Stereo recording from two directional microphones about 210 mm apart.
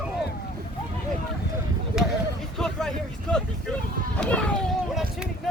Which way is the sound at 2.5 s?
Centre (ahead or behind).